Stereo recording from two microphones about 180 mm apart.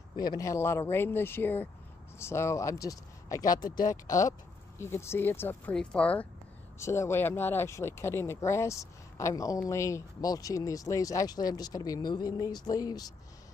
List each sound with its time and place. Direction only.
0.2 s speech: 20° left (ahead or behind)